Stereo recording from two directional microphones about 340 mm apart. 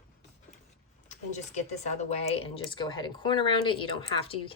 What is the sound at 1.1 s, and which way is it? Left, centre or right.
Speech, centre.